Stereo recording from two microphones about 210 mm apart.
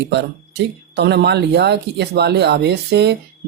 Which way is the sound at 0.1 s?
55° right (ahead or behind).